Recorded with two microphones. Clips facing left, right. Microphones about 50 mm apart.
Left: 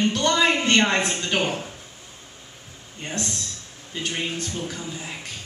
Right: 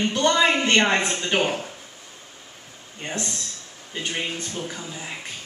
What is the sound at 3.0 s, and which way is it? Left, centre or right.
A woman's voice, centre.